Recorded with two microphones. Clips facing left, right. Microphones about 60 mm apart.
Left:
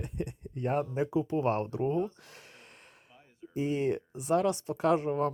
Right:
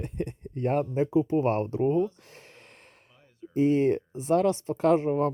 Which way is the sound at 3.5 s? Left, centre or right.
Right.